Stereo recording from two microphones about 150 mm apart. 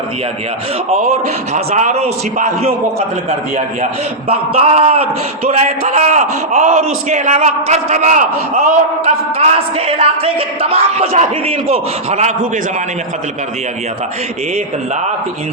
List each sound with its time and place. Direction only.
0.9 s a man's voice: 45° right (ahead or behind)
4.3 s a man's voice: 45° right (ahead or behind)
9.4 s a man's voice: 40° right (ahead or behind)